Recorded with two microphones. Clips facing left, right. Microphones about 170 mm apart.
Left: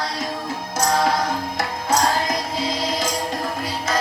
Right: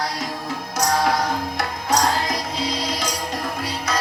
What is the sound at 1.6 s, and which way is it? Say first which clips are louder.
Music: left 1 dB; 25° left (ahead or behind).